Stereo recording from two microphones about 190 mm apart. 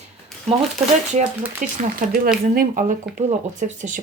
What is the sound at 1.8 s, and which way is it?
Speech, 45° right (ahead or behind).